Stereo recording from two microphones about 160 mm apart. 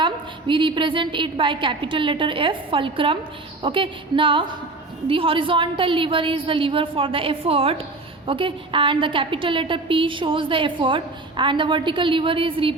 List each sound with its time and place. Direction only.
0.0 s a woman's voice: 30° right (ahead or behind)